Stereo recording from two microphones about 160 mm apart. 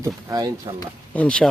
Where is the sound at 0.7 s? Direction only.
35° right (ahead or behind).